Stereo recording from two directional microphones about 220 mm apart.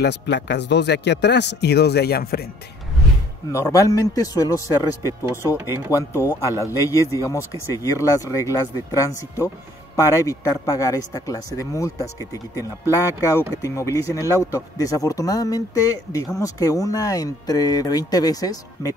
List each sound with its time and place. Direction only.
0.0 s a man's voice: 50° left (ahead or behind)
3.5 s speech: 15° left (ahead or behind)